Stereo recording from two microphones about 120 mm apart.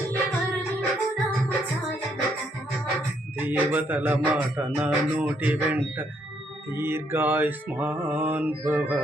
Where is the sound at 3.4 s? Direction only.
15° right (ahead or behind).